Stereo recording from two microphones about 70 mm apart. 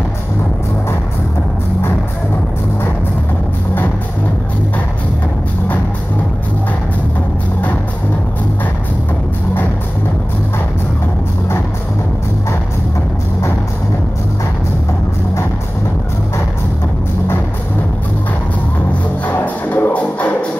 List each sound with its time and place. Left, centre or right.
19.2 s music: left